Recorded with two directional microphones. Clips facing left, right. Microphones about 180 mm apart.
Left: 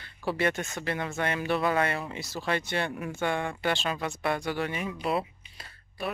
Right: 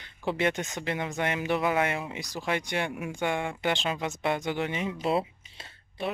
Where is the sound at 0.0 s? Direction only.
20° right (ahead or behind).